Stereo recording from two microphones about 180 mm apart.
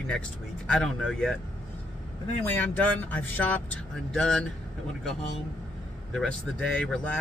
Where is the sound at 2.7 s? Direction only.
10° left (ahead or behind).